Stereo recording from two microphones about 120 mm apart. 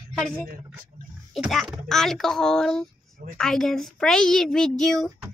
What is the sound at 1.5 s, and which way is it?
A child's voice, centre (ahead or behind).